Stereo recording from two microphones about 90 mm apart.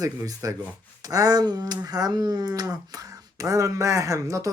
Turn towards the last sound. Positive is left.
turn(degrees=-35)  # may be behind; listen again after turning